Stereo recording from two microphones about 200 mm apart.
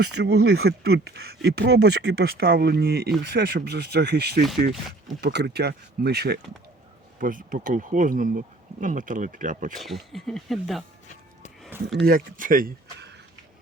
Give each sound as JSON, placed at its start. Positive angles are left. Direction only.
{"t": 0.2, "sound": "speech", "side_deg": -55}
{"t": 7.2, "sound": "speech", "side_deg": -45}
{"t": 9.7, "sound": "speech", "side_deg": 0}
{"t": 12.0, "sound": "speech", "side_deg": -45}